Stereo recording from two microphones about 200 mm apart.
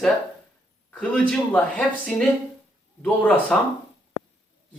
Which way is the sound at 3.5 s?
5° left (ahead or behind).